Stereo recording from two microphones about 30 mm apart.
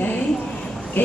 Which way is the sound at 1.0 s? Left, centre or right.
Left.